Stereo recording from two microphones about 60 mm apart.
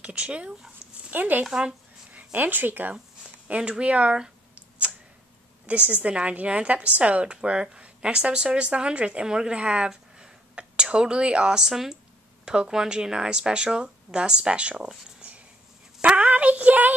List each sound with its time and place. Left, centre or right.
0.0 s speech: centre
1.1 s a woman's voice: right
1.4 s speech: centre
2.1 s speech: right
3.4 s a sound: centre
5.7 s a woman's voice: right
16.0 s child singing: right